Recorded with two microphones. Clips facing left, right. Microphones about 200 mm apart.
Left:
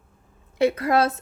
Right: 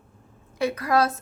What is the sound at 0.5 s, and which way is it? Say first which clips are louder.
Speech: left 3 dB; 25° left (ahead or behind).